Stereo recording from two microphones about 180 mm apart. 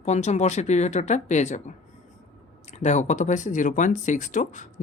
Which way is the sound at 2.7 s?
40° left (ahead or behind).